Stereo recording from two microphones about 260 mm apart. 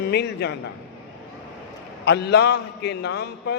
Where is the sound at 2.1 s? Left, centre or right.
Left.